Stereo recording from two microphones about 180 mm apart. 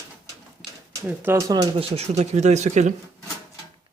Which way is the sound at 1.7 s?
35° right (ahead or behind).